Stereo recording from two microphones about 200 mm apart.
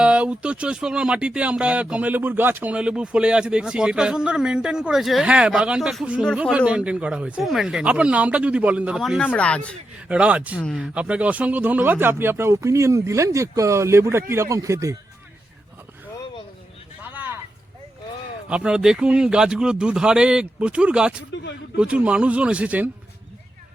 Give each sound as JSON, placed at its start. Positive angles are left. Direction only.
{"t": 0.0, "sound": "speech", "side_deg": -5}
{"t": 10.1, "sound": "speech", "side_deg": -5}
{"t": 10.6, "sound": "speech", "side_deg": 5}
{"t": 10.9, "sound": "speech", "side_deg": -5}
{"t": 17.0, "sound": "a sound", "side_deg": -10}
{"t": 18.4, "sound": "speech", "side_deg": -5}